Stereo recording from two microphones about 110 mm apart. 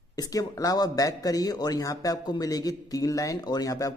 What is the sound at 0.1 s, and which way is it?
Speech, 35° left (ahead or behind).